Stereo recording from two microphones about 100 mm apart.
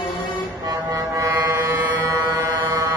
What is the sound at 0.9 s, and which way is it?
Vehicle, 35° right (ahead or behind).